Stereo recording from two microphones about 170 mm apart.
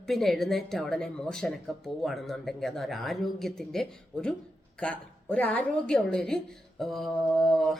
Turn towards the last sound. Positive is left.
turn(degrees=0)  # may be behind; listen again after turning